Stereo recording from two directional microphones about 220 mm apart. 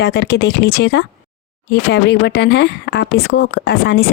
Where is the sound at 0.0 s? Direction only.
50° left (ahead or behind).